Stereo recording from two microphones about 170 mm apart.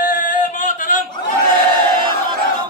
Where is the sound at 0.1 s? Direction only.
50° left (ahead or behind).